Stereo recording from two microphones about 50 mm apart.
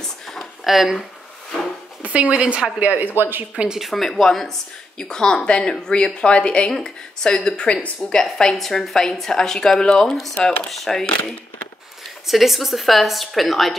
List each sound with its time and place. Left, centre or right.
0.0 s a sound: centre
0.7 s a woman's voice: centre
2.0 s speech: right
2.8 s speech: right
3.2 s speech: right
3.5 s speech: centre
3.8 s speech: centre
10.7 s a woman's voice: centre
12.3 s a woman's voice: centre